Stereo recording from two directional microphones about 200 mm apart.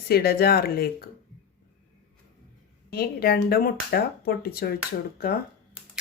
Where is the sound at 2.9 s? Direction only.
50° left (ahead or behind).